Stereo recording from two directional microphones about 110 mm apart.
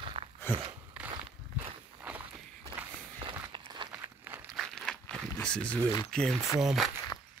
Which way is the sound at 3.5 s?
45° right (ahead or behind).